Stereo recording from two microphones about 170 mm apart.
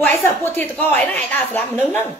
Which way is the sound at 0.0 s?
10° left (ahead or behind).